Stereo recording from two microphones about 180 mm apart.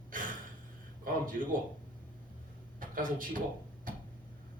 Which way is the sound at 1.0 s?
50° right (ahead or behind).